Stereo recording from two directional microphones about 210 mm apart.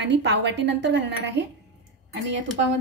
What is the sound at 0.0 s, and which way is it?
A woman's voice, 55° right (ahead or behind).